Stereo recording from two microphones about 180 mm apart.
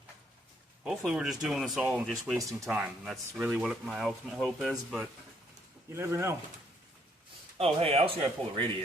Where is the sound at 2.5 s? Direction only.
10° right (ahead or behind).